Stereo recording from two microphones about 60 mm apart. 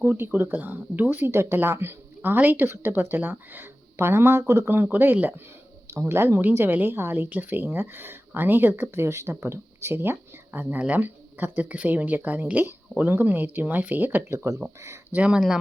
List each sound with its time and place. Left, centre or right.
0.0 s a woman's voice: right
1.3 s a woman's voice: right
5.9 s speech: right
6.4 s a woman's voice: right
14.3 s speech: right
15.1 s speech: right